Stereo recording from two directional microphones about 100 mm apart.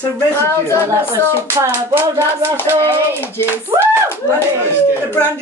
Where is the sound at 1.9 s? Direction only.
25° right (ahead or behind).